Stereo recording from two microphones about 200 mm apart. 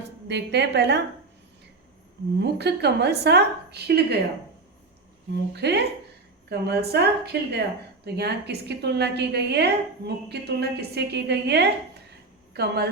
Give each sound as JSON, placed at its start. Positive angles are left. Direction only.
{"t": 0.3, "sound": "a woman's voice", "side_deg": -60}
{"t": 2.4, "sound": "a woman's voice", "side_deg": -55}
{"t": 5.5, "sound": "a woman's voice", "side_deg": -55}